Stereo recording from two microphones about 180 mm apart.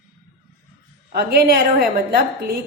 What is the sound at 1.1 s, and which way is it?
A woman's voice, 60° right (ahead or behind).